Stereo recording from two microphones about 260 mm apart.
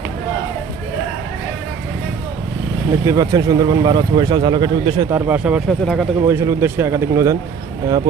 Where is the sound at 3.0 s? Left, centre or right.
Centre.